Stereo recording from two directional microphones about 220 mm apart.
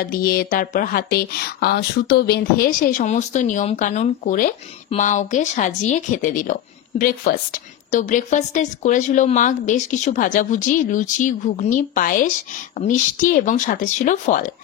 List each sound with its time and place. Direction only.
0.0 s speech: 40° left (ahead or behind)